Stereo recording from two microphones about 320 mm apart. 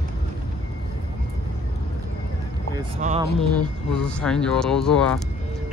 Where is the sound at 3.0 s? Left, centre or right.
Right.